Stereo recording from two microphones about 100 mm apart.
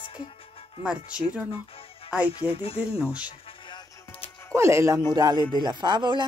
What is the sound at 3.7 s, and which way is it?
Music, 70° left (ahead or behind).